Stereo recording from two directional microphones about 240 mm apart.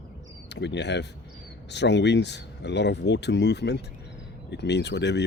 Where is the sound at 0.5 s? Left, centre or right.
Left.